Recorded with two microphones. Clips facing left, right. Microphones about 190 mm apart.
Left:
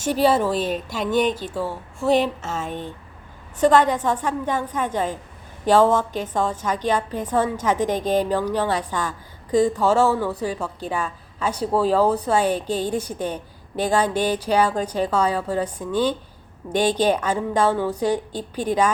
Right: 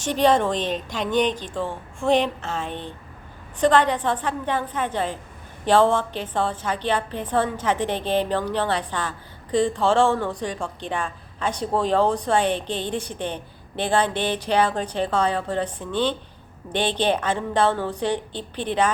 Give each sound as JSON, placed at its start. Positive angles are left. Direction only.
{"t": 0.0, "sound": "a woman's voice", "side_deg": 5}